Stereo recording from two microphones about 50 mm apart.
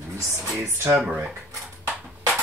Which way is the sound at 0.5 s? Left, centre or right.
Right.